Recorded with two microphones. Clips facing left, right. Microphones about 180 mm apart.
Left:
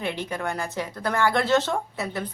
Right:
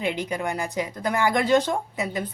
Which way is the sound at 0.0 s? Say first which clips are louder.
Right 2 dB; 15° right (ahead or behind).